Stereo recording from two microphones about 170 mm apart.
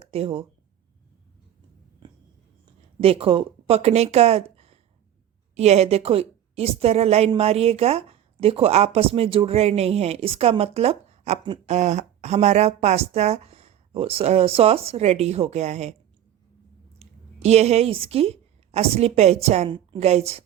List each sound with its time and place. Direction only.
0.1 s speech: 35° right (ahead or behind)
2.0 s a sound: 25° right (ahead or behind)
3.0 s speech: 35° right (ahead or behind)
17.0 s a woman's voice: 40° right (ahead or behind)